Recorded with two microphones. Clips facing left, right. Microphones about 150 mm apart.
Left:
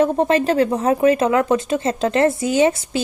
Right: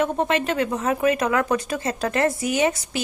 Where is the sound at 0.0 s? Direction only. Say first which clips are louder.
Left 6 dB; 35° left (ahead or behind).